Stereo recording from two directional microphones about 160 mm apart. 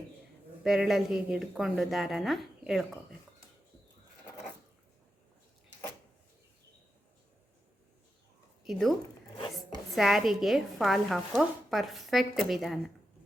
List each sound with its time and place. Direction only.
0.6 s speech: 5° right (ahead or behind)
8.6 s speech: centre (ahead or behind)